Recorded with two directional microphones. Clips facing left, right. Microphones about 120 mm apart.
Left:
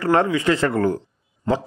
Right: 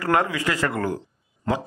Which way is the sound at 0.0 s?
30° left (ahead or behind).